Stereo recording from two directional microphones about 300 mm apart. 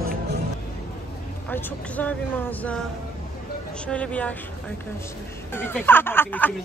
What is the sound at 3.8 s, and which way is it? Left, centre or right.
Speech, centre.